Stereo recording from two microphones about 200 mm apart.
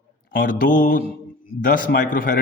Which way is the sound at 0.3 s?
45° left (ahead or behind).